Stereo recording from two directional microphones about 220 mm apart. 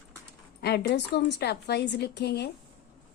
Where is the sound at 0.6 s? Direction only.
50° left (ahead or behind).